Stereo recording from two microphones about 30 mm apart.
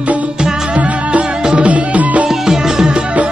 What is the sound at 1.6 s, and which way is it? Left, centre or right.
Music, right.